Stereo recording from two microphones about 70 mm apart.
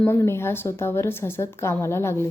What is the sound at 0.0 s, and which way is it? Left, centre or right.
Speech, left.